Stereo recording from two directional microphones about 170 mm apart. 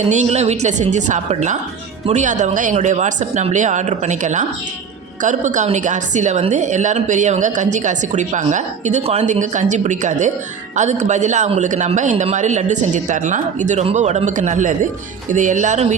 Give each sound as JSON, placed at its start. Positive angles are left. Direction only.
{"t": 0.1, "sound": "a woman's voice", "side_deg": -40}